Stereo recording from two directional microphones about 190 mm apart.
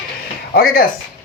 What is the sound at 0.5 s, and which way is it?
Speech, 50° left (ahead or behind).